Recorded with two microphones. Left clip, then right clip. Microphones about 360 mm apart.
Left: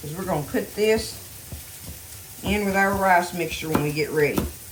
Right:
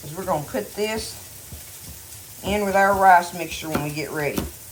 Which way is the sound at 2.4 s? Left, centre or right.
Centre.